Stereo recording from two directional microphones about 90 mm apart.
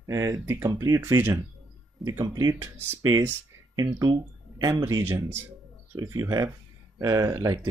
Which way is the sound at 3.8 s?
35° right (ahead or behind).